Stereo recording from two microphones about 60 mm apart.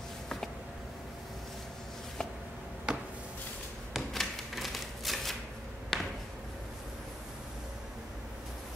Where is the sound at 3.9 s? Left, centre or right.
Centre.